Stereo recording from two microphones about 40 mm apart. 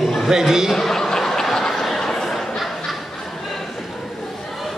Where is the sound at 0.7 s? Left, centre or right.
Centre.